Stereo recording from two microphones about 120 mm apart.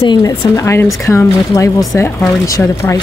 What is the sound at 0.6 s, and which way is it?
Speech, 25° left (ahead or behind).